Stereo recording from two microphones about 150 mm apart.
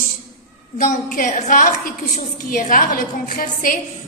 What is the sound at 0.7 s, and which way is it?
A woman's voice, 65° left (ahead or behind).